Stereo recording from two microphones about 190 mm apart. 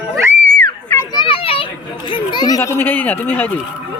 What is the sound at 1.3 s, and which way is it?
Children playing, 30° left (ahead or behind).